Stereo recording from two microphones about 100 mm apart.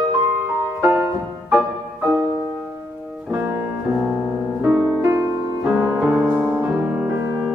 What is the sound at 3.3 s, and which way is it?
Music, 20° right (ahead or behind).